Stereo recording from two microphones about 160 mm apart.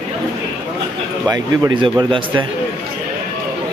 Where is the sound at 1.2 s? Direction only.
25° right (ahead or behind).